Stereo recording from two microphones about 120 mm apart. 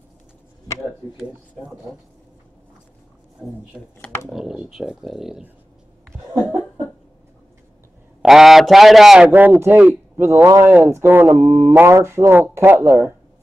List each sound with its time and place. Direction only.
3.4 s speech: 5° right (ahead or behind)
8.2 s speech: 5° right (ahead or behind)
9.3 s speech: 15° right (ahead or behind)